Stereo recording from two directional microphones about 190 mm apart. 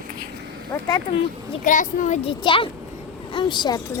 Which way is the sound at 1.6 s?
45° left (ahead or behind).